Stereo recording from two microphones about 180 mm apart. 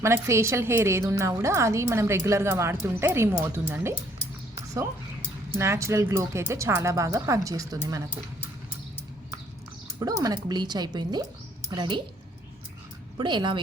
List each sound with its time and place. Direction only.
0.0 s a woman's voice: 15° right (ahead or behind)
4.5 s a sound: 20° right (ahead or behind)
5.5 s a woman's voice: 15° right (ahead or behind)
10.0 s speech: 20° right (ahead or behind)
13.1 s speech: 25° right (ahead or behind)